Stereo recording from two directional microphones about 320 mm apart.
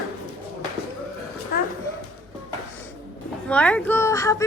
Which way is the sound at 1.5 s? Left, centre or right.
Left.